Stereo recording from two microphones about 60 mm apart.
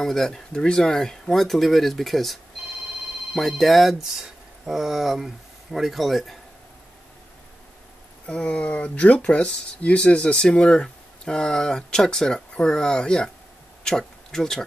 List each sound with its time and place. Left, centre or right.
0.0 s speech: centre
3.3 s speech: centre
8.3 s speech: centre